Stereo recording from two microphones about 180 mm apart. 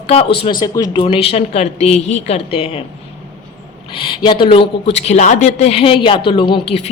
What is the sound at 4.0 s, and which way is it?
Speech, 25° left (ahead or behind).